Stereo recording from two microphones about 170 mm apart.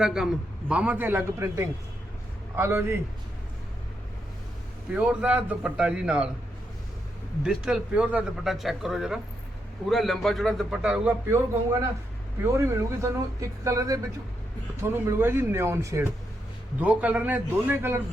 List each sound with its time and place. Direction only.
0.0 s a man's voice: 5° right (ahead or behind)
4.9 s a man's voice: 5° right (ahead or behind)
7.4 s speech: 5° right (ahead or behind)
12.4 s a man's voice: 15° right (ahead or behind)